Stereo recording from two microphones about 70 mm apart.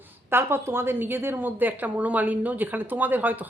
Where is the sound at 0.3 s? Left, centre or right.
Right.